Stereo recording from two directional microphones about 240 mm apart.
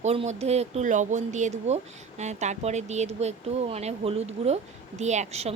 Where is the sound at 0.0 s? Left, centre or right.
Right.